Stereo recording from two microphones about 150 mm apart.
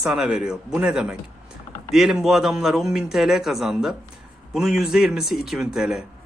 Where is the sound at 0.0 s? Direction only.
5° right (ahead or behind).